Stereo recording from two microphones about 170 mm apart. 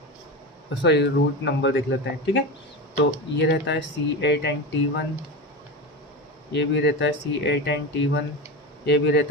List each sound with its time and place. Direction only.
0.7 s speech: 85° left
3.4 s speech: 90° left
6.5 s speech: 90° left